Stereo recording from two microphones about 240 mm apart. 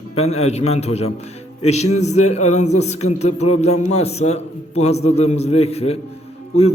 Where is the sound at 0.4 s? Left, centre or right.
Left.